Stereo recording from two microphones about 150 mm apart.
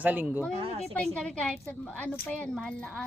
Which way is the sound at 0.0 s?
10° right (ahead or behind).